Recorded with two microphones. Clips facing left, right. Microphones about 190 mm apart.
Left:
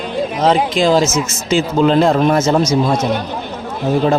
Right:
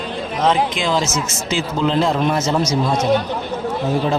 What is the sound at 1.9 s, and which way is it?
Speech, 50° left (ahead or behind).